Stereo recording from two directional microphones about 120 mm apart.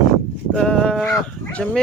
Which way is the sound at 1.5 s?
5° left (ahead or behind).